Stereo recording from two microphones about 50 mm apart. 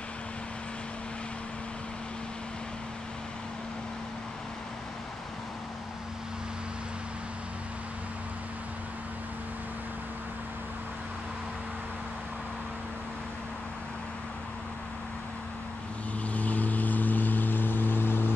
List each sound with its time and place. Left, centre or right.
16.3 s vehicle: left